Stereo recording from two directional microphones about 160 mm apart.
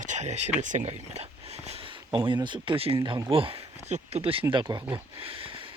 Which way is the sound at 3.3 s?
35° right (ahead or behind).